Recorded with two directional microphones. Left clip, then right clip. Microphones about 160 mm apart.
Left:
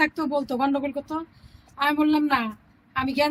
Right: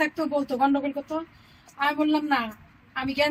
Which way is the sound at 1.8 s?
40° left (ahead or behind).